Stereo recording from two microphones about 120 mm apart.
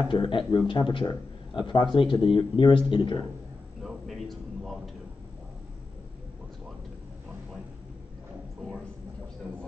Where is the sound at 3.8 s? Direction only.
Centre (ahead or behind).